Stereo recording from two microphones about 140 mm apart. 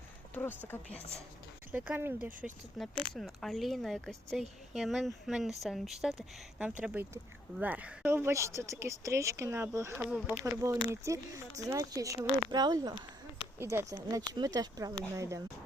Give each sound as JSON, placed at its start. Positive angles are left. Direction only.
{"t": 0.7, "sound": "speech", "side_deg": 15}
{"t": 1.7, "sound": "speech", "side_deg": -10}
{"t": 2.7, "sound": "speech", "side_deg": 5}
{"t": 10.1, "sound": "speech", "side_deg": -5}
{"t": 10.4, "sound": "speech", "side_deg": -20}